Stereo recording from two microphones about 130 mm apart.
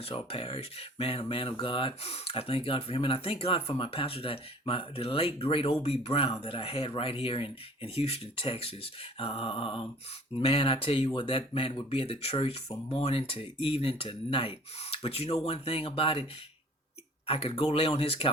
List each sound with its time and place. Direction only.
0.0 s speech: 45° left (ahead or behind)
17.2 s speech: 45° left (ahead or behind)